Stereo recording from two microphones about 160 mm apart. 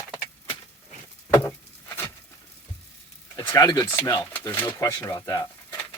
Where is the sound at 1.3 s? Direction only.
15° left (ahead or behind).